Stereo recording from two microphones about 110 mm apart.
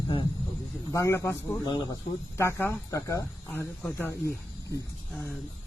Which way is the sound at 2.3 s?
25° left (ahead or behind).